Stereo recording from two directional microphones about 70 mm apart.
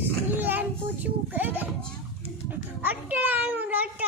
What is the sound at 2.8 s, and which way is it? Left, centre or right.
A child's voice, right.